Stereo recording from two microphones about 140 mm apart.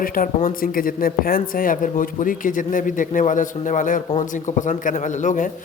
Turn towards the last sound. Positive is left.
turn(degrees=60)  # may be behind; listen again after turning